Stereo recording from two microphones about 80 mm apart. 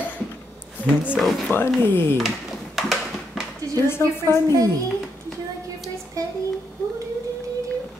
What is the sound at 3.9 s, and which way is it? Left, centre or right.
Speech, left.